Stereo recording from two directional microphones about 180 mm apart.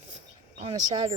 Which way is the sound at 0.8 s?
25° right (ahead or behind).